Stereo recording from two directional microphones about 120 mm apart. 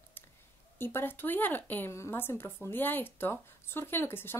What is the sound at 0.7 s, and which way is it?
Speech, 20° left (ahead or behind).